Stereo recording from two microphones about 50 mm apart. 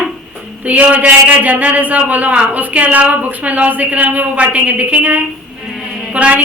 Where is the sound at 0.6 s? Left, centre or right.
Right.